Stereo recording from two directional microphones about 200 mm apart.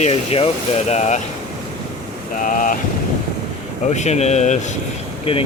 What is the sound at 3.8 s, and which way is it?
Speech, 35° left (ahead or behind).